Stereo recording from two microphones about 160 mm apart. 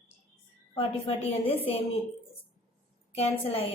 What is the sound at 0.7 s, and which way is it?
Speech, 35° left (ahead or behind).